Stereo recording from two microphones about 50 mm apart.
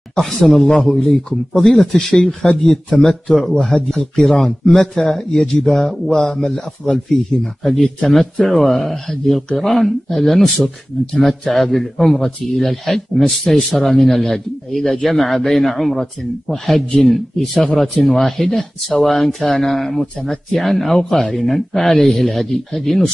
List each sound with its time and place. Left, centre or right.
0.1 s a man's voice: centre